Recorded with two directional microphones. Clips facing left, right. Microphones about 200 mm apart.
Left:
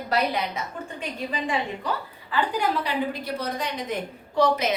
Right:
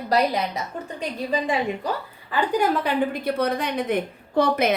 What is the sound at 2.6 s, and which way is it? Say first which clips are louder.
A woman's voice: right 4 dB; 55° right (ahead or behind).